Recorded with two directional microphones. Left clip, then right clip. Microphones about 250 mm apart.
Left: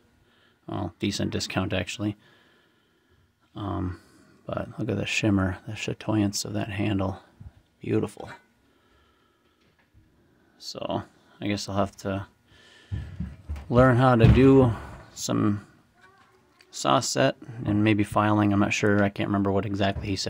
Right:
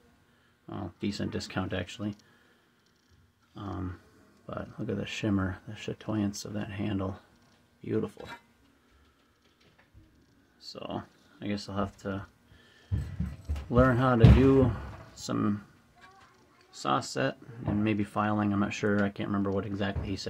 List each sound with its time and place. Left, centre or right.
0.7 s speech: left
3.5 s speech: left
10.6 s speech: left
16.7 s speech: left